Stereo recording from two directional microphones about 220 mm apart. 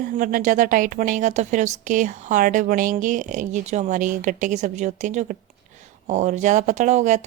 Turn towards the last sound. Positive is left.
turn(degrees=-30)  # may be behind; listen again after turning